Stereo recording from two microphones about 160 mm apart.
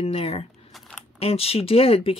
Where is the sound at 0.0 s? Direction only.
40° left (ahead or behind).